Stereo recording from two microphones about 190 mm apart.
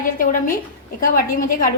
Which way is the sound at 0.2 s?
50° left (ahead or behind).